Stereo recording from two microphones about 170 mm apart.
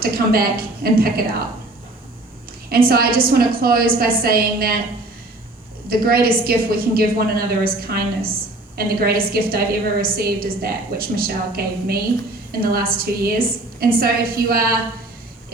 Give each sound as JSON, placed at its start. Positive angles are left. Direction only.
{"t": 0.0, "sound": "a woman's voice", "side_deg": -60}
{"t": 2.6, "sound": "a woman's voice", "side_deg": -60}
{"t": 5.9, "sound": "a woman's voice", "side_deg": -60}